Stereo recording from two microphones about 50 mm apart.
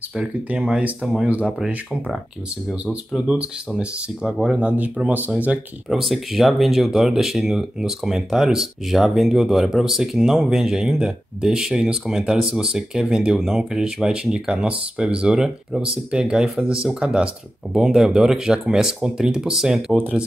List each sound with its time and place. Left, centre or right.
0.2 s speech: right
3.2 s speech: centre
5.9 s speech: centre